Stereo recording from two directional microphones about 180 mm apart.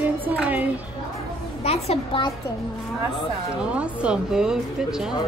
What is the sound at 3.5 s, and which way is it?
Speech, 5° right (ahead or behind).